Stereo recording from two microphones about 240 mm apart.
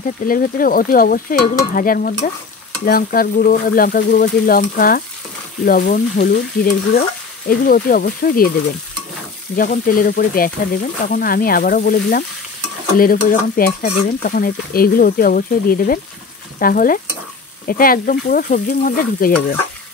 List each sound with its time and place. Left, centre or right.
0.3 s stir: left
9.6 s stir: left